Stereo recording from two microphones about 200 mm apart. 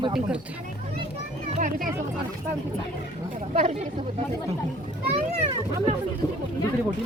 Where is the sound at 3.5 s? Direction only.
35° right (ahead or behind).